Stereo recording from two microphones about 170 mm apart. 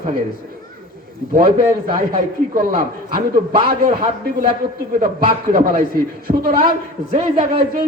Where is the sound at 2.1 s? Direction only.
60° right (ahead or behind).